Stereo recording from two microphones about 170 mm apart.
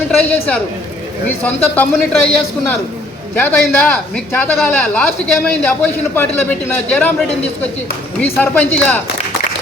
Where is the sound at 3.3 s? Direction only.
10° left (ahead or behind).